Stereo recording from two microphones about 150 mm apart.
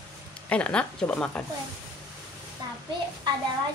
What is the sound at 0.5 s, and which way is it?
Speech, 5° left (ahead or behind).